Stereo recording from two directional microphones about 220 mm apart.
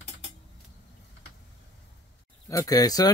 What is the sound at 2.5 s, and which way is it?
Speech, 15° left (ahead or behind).